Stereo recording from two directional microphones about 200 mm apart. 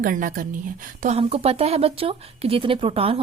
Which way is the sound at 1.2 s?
30° right (ahead or behind).